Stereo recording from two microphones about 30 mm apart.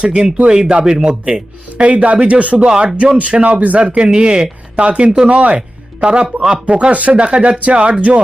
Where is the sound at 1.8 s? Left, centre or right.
Right.